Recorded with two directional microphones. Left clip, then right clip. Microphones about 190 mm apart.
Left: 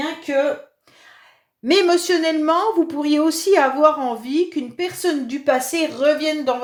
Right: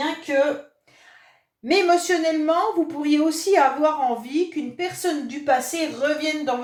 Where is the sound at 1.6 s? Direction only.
50° left (ahead or behind).